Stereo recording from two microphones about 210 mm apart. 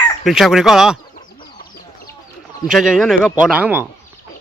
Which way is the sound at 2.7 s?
Centre (ahead or behind).